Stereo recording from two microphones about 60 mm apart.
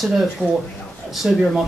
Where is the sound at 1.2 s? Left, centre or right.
Centre.